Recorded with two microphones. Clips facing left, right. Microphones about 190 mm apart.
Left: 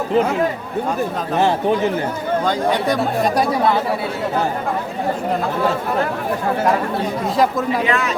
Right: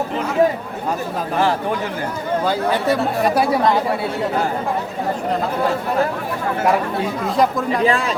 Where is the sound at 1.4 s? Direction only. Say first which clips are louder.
Left 4 dB; 25° left (ahead or behind).